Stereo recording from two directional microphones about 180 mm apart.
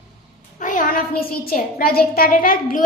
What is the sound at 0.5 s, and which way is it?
A child's voice, 45° left (ahead or behind).